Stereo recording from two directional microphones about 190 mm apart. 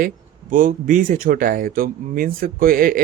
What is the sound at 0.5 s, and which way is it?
Speech, 45° right (ahead or behind).